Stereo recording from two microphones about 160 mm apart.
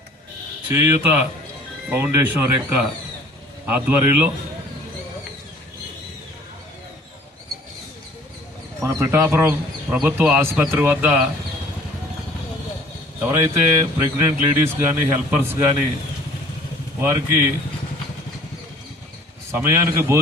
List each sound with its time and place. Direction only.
0.7 s a man's voice: 15° right (ahead or behind)
8.8 s a man's voice: 15° right (ahead or behind)
13.2 s a man's voice: 15° right (ahead or behind)
17.0 s a man's voice: 15° right (ahead or behind)
19.5 s a man's voice: 15° right (ahead or behind)